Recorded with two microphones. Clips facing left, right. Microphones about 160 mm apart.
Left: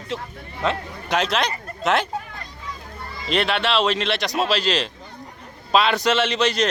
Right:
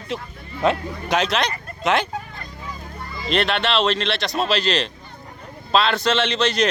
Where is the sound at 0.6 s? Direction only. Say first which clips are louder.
Right 4 dB; centre (ahead or behind).